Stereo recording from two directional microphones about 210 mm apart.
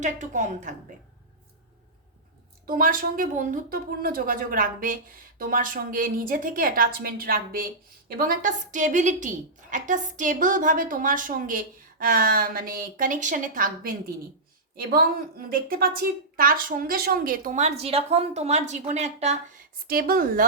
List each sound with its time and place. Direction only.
0.0 s a woman's voice: 35° right (ahead or behind)
2.6 s a woman's voice: 40° right (ahead or behind)
19.9 s a woman's voice: 45° right (ahead or behind)